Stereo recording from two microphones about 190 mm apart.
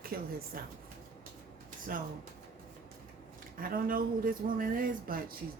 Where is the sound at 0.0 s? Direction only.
50° right (ahead or behind).